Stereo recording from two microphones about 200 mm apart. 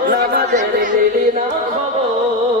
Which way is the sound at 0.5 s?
40° right (ahead or behind).